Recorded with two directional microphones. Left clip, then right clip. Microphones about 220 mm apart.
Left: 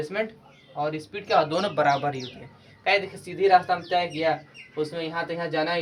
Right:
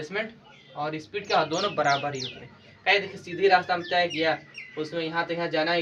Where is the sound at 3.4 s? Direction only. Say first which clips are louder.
Left 2 dB; 20° left (ahead or behind).